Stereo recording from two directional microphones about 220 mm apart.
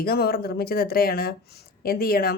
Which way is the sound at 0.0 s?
45° left (ahead or behind).